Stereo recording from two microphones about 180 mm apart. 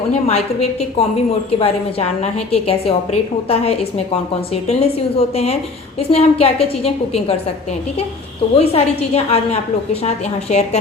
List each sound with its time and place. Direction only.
0.1 s a woman's voice: 35° left (ahead or behind)
8.5 s a woman's voice: 35° left (ahead or behind)